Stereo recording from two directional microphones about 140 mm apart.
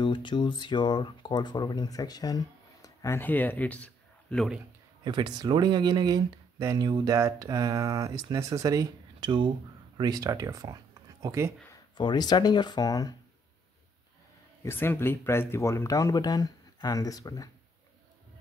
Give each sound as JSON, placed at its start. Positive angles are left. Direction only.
{"t": 0.0, "sound": "speech", "side_deg": 35}
{"t": 5.0, "sound": "speech", "side_deg": -30}
{"t": 12.0, "sound": "speech", "side_deg": 30}
{"t": 14.6, "sound": "speech", "side_deg": 15}